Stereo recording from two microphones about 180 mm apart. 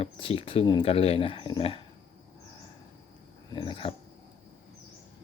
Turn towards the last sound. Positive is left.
turn(degrees=30)  # may be behind; listen again after turning